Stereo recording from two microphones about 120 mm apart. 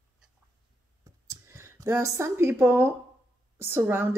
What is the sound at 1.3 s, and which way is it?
A woman's voice, 25° right (ahead or behind).